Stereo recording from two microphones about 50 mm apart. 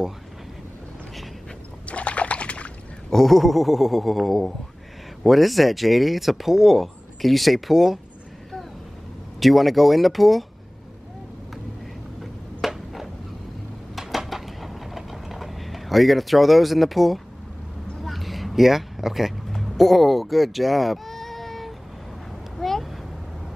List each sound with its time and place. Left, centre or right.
1.9 s a sound: left
3.1 s speech: centre
9.4 s speech: centre
12.2 s a sound: centre
19.5 s sheep: centre
22.6 s vehicle: centre